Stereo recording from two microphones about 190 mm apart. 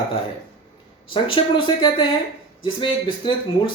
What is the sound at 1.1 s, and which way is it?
Speech, 25° left (ahead or behind).